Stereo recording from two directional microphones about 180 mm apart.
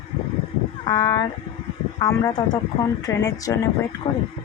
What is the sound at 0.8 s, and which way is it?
Speech, 20° left (ahead or behind).